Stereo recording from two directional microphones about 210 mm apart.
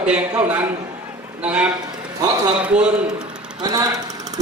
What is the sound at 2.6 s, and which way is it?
Speech, 5° right (ahead or behind).